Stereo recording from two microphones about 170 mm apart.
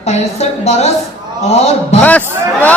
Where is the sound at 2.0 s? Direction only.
10° left (ahead or behind).